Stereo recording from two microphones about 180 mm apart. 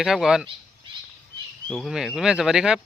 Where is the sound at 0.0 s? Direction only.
Centre (ahead or behind).